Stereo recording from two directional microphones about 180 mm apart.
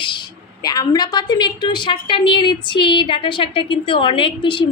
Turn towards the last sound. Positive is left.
turn(degrees=25)  # may be behind; listen again after turning